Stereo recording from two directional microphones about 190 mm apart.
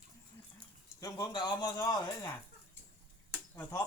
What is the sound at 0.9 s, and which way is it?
Speech, 15° left (ahead or behind).